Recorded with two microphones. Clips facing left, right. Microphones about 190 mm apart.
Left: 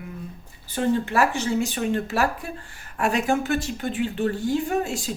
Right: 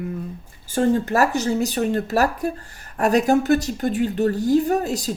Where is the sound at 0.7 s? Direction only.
45° right (ahead or behind).